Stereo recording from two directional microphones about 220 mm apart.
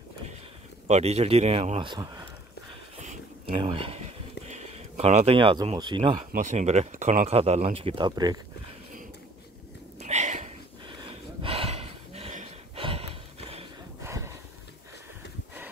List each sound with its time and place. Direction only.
0.8 s speech: 30° right (ahead or behind)
3.0 s a sound: 35° right (ahead or behind)
6.3 s speech: 30° right (ahead or behind)
9.9 s a sound: 30° right (ahead or behind)
11.1 s gasp: 25° right (ahead or behind)
14.0 s horse: 10° right (ahead or behind)